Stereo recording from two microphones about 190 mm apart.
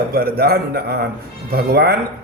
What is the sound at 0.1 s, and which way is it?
A man's voice, 55° right (ahead or behind).